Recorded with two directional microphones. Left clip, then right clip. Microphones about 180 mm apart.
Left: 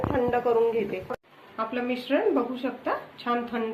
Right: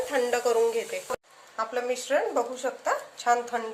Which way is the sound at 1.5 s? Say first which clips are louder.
Right 1 dB; 55° right (ahead or behind).